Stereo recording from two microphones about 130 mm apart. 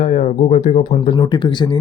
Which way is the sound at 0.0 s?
60° left (ahead or behind).